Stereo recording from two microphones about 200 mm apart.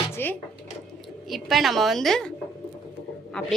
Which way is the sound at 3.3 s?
5° left (ahead or behind).